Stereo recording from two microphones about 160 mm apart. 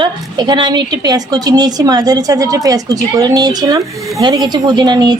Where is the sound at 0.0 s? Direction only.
30° right (ahead or behind).